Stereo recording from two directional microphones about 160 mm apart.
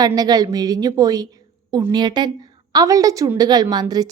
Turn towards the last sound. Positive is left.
turn(degrees=-25)  # may be behind; listen again after turning